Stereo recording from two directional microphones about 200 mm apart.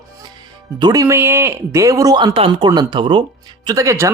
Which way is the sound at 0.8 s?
20° right (ahead or behind).